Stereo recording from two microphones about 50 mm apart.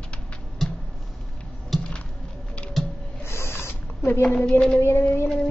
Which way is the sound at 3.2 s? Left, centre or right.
Left.